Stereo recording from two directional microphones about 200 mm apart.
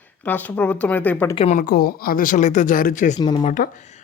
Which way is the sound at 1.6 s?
50° left (ahead or behind).